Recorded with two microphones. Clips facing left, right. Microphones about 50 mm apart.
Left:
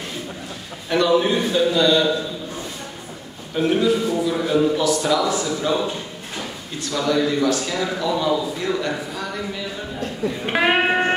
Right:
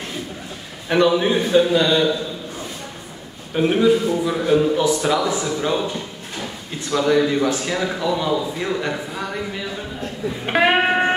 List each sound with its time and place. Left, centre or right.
0.8 s a man's voice: centre
3.5 s a man's voice: centre
5.6 s a man's voice: centre
6.8 s a man's voice: right
8.0 s a man's voice: centre
10.4 s music: centre